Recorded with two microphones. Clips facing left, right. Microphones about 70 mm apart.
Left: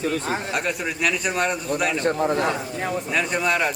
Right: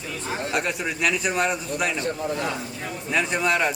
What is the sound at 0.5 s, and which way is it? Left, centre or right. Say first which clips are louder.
A man's voice: even; centre.